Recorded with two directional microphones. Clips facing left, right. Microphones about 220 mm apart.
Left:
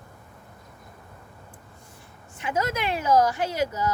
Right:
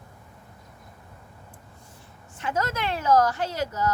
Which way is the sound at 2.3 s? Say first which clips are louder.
Left 1 dB; 10° left (ahead or behind).